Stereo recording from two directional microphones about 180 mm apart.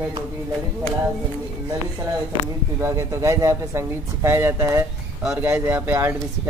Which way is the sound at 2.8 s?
15° right (ahead or behind).